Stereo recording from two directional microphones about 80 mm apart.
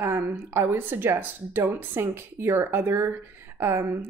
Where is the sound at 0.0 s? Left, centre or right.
Right.